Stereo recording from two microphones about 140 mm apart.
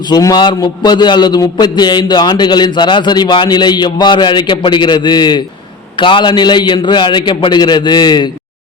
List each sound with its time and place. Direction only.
0.1 s a man's voice: 30° left (ahead or behind)